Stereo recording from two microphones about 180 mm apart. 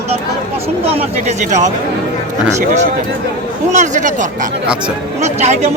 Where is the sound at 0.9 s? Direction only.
40° right (ahead or behind).